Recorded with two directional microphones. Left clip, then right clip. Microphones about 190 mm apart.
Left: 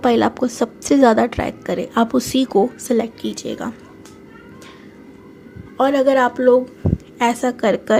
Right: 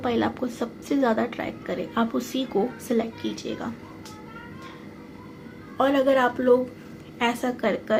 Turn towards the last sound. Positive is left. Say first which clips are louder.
# left 8 dB
turn(degrees=50)  # may be behind; listen again after turning